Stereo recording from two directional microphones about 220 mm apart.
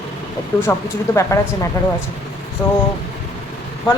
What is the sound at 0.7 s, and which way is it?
Speech, 15° left (ahead or behind).